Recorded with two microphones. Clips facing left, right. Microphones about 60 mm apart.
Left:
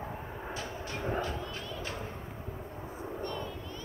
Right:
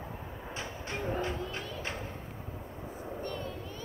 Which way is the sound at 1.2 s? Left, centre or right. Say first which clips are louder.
Right 1 dB; right.